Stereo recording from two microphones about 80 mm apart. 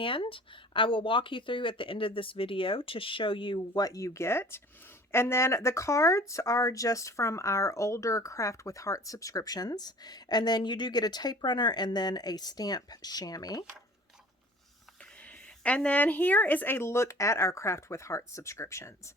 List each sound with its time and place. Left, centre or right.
0.0 s speech: left
3.8 s speech: left
15.6 s speech: centre; by 18.9 s left